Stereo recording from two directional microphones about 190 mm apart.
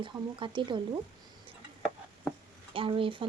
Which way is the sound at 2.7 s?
30° right (ahead or behind).